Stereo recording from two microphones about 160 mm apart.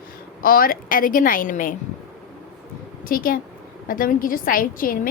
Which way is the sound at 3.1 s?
60° left (ahead or behind).